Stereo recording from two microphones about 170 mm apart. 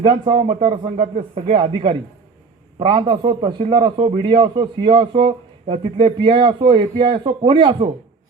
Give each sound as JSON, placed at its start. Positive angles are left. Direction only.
{"t": 0.0, "sound": "a man's voice", "side_deg": -30}